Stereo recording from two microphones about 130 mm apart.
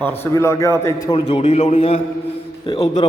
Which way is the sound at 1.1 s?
50° left (ahead or behind).